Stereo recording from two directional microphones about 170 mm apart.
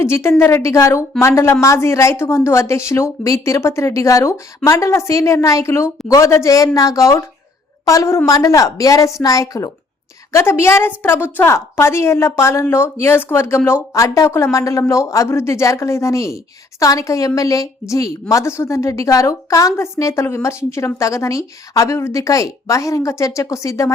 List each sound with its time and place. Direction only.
0.0 s a woman's voice: 15° left (ahead or behind)